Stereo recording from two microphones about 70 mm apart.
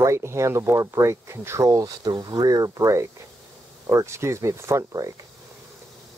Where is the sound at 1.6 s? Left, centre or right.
Right.